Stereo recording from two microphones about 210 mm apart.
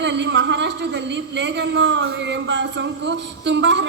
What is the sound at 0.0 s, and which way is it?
A woman's voice, 55° right (ahead or behind).